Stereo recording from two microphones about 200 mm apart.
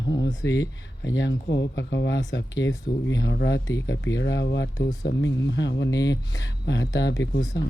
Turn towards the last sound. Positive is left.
turn(degrees=60)  # may be behind; listen again after turning